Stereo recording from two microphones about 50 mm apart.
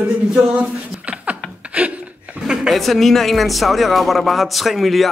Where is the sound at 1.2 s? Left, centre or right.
Right.